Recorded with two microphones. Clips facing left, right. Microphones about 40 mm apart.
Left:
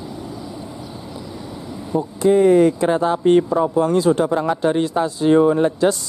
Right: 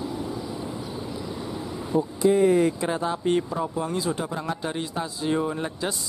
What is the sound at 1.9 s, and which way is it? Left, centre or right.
Speech, centre.